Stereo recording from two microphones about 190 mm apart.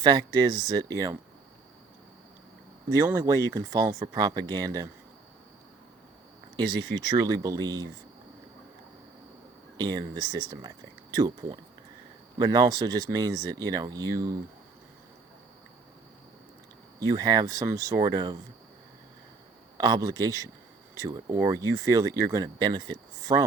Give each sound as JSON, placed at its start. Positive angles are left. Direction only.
{"t": 0.0, "sound": "speech", "side_deg": -20}
{"t": 2.9, "sound": "speech", "side_deg": -15}
{"t": 6.6, "sound": "speech", "side_deg": -20}
{"t": 9.7, "sound": "speech", "side_deg": -20}
{"t": 17.0, "sound": "speech", "side_deg": -20}
{"t": 19.7, "sound": "speech", "side_deg": -20}